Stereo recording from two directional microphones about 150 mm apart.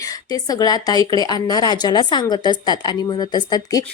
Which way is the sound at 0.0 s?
25° left (ahead or behind).